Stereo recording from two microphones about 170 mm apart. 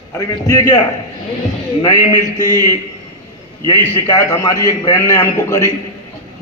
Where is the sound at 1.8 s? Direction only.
20° left (ahead or behind).